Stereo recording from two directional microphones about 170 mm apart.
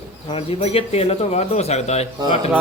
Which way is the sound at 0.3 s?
35° left (ahead or behind).